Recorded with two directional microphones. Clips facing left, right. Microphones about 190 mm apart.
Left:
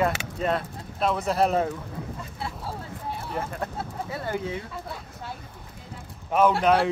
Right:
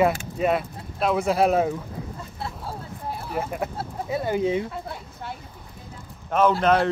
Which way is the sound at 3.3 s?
10° right (ahead or behind).